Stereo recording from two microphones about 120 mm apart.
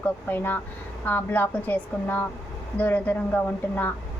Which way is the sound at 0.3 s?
15° left (ahead or behind).